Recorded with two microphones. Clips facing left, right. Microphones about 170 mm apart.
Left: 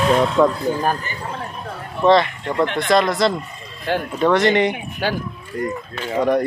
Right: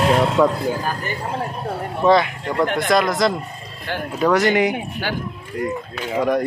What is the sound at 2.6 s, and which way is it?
Speech, 50° right (ahead or behind).